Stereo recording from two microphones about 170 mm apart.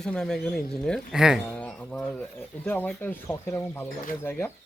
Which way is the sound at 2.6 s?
10° left (ahead or behind).